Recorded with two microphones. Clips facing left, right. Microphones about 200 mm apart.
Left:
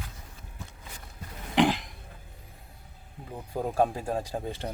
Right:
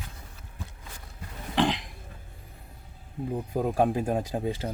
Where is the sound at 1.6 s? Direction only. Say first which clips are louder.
Left 2 dB; 5° left (ahead or behind).